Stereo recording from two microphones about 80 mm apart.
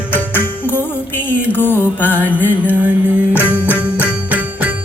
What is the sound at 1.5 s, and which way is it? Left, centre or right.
Music, left.